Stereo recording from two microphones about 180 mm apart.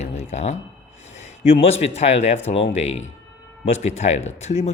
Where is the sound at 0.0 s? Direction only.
35° left (ahead or behind).